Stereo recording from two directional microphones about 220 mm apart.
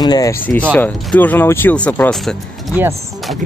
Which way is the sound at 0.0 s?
15° left (ahead or behind).